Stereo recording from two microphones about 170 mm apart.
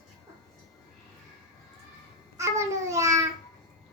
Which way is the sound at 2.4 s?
15° right (ahead or behind).